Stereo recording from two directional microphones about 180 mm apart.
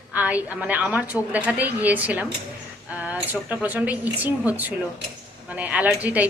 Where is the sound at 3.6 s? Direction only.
10° right (ahead or behind).